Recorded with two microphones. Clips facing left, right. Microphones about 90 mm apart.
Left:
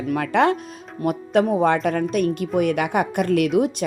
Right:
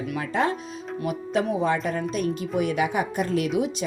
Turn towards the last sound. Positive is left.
turn(degrees=55)  # may be behind; listen again after turning